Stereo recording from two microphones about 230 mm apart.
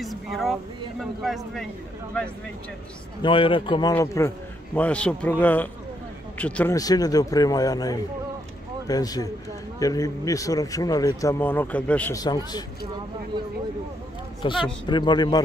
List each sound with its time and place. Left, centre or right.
0.0 s speech: centre
3.2 s speech: left
14.4 s speech: left